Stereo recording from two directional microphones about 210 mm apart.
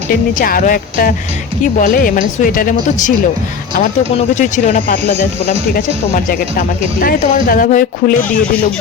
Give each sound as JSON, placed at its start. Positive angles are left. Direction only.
{"t": 0.1, "sound": "speech", "side_deg": 40}
{"t": 4.4, "sound": "speech", "side_deg": 35}